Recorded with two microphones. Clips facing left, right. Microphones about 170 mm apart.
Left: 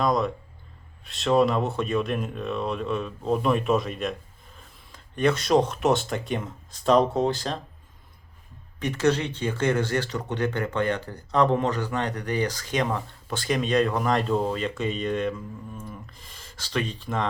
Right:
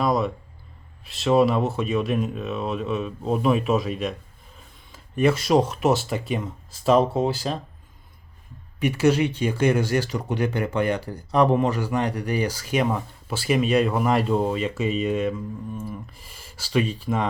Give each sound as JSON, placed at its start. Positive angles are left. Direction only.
{"t": 0.0, "sound": "speech", "side_deg": -5}
{"t": 8.8, "sound": "speech", "side_deg": -10}